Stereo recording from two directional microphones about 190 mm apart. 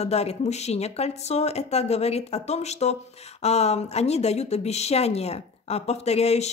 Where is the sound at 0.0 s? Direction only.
35° left (ahead or behind).